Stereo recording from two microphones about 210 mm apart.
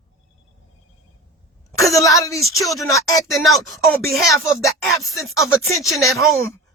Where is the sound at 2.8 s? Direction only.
15° left (ahead or behind).